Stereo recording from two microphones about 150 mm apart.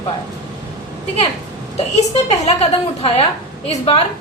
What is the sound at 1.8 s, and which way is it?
A woman's voice, 45° left (ahead or behind).